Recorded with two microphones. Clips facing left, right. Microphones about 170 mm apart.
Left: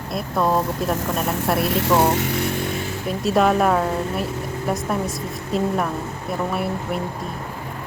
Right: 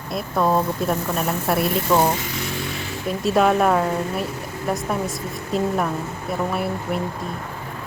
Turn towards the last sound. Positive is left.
turn(degrees=0)  # may be behind; listen again after turning